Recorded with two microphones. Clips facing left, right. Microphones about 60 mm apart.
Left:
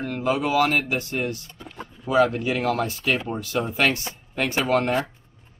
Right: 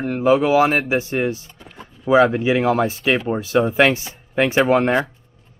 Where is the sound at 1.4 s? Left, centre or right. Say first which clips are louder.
Left 1 dB; centre.